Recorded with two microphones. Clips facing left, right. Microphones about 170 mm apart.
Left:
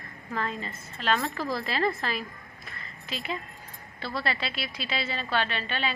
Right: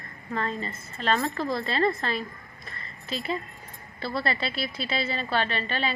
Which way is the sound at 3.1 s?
35° right (ahead or behind).